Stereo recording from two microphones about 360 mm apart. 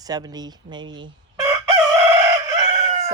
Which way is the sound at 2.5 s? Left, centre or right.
Centre.